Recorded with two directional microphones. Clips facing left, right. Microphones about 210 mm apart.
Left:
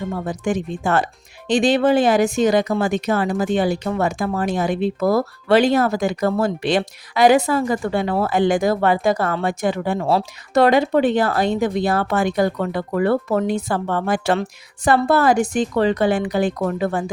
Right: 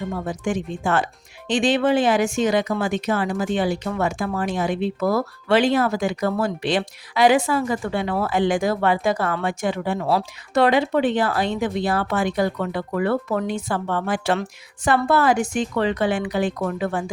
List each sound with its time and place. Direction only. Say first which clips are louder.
0.4 s speech: left 3 dB; 40° left (ahead or behind)
10.0 s speech: left 2 dB; 25° left (ahead or behind)
10.5 s speech: left 3 dB; 40° left (ahead or behind)